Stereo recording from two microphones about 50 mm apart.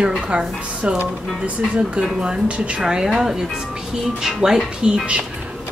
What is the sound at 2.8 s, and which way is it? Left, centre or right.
Speech, centre.